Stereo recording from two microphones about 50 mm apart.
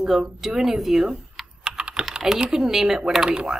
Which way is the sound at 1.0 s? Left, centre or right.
Centre.